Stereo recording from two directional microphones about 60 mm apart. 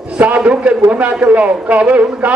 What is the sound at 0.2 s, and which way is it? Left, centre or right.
A man's voice, right.